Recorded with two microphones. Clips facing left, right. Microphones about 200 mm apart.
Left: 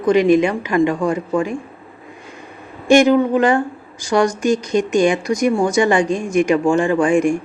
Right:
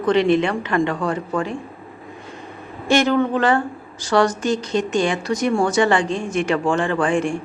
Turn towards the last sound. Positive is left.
turn(degrees=10)  # may be behind; listen again after turning